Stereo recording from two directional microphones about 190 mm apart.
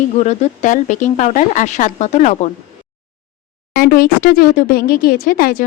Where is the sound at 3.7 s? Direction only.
50° left (ahead or behind).